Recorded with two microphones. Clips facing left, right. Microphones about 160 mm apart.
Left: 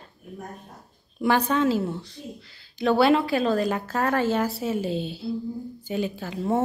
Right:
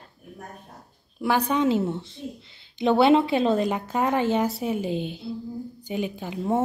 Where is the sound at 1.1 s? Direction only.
10° right (ahead or behind).